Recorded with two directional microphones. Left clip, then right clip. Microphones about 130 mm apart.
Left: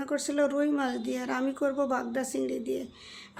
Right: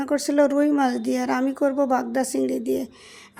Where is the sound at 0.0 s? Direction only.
50° right (ahead or behind).